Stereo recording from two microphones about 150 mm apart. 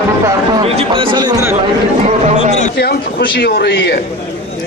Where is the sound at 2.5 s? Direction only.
50° left (ahead or behind).